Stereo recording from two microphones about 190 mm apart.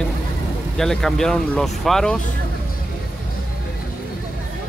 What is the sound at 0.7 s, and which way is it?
Speech, centre (ahead or behind).